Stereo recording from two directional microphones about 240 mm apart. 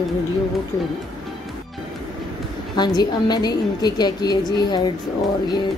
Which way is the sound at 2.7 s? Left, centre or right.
Centre.